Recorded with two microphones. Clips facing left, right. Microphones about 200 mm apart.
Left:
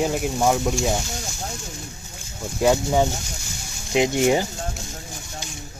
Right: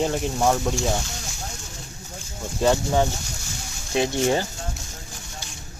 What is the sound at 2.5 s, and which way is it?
Speech, 10° left (ahead or behind).